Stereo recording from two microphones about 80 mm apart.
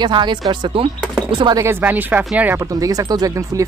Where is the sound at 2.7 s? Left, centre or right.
Right.